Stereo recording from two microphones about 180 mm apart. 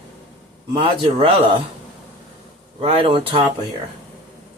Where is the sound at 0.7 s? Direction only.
30° right (ahead or behind).